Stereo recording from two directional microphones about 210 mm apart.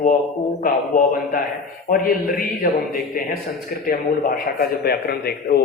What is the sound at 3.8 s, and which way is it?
A man's voice, 45° left (ahead or behind).